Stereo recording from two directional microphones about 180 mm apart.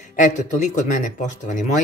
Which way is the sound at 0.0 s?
45° left (ahead or behind).